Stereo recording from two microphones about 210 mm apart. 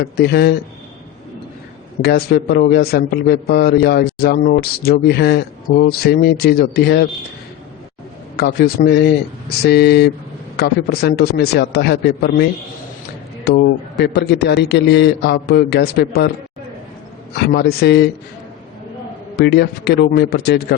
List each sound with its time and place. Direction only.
0.0 s a man's voice: 50° left (ahead or behind)
2.0 s a man's voice: 50° left (ahead or behind)
8.4 s a man's voice: 45° left (ahead or behind)
13.5 s a man's voice: 50° left (ahead or behind)
17.3 s a man's voice: 50° left (ahead or behind)
19.4 s a man's voice: 50° left (ahead or behind)